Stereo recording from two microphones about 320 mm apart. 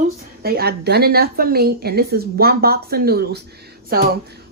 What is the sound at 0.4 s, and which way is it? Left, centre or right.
Speech, right.